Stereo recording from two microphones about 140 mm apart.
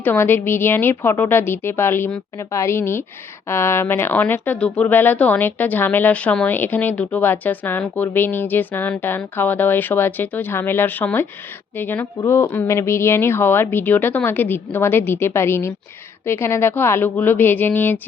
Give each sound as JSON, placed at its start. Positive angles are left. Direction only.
{"t": 0.0, "sound": "a woman's voice", "side_deg": 15}